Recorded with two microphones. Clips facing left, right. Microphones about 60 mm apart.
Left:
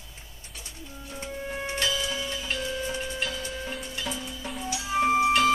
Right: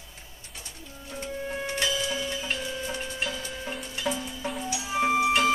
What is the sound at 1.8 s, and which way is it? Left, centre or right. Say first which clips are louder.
Music: even; centre.